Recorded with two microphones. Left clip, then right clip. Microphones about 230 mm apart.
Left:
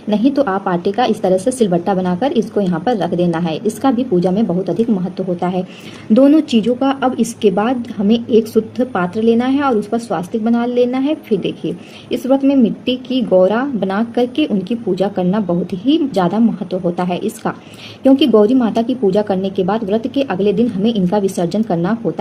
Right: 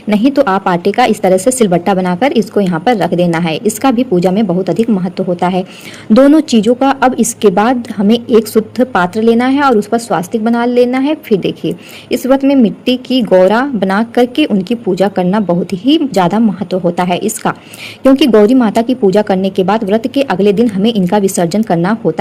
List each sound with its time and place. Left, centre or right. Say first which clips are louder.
0.1 s a woman's voice: right 5 dB; right